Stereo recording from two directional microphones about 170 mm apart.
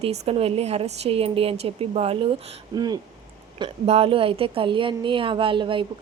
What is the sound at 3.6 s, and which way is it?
A woman's voice, 35° right (ahead or behind).